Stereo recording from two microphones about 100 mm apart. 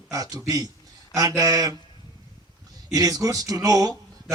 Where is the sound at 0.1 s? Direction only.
35° right (ahead or behind).